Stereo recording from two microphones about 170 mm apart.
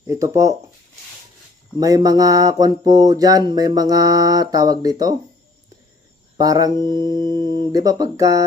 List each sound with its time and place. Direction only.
0.1 s mantra: 20° right (ahead or behind)
1.7 s mantra: 20° right (ahead or behind)
6.3 s mantra: 20° right (ahead or behind)